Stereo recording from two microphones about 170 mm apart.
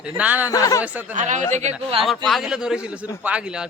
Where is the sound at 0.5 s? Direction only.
20° left (ahead or behind).